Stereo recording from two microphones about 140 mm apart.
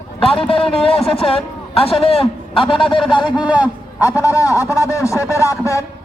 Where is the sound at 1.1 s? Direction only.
45° left (ahead or behind).